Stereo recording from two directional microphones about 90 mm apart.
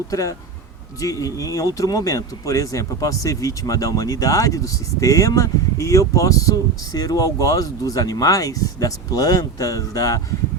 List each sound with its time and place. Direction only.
0.1 s speech: 35° left (ahead or behind)